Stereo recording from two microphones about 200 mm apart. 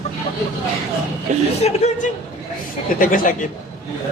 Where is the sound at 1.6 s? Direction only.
35° left (ahead or behind).